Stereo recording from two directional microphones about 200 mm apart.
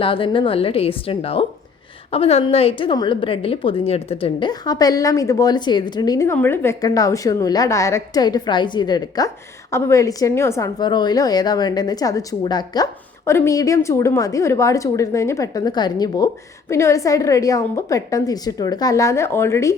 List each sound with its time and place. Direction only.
0.0 s a woman's voice: 25° left (ahead or behind)